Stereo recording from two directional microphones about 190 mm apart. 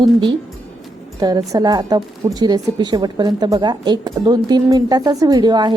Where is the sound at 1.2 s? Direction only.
20° right (ahead or behind).